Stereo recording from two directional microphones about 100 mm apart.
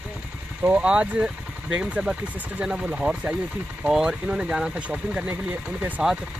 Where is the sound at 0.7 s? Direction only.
10° right (ahead or behind).